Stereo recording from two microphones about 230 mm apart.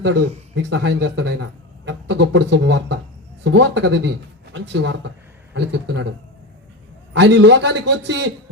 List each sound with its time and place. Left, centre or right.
0.0 s speech: right
7.1 s speech: right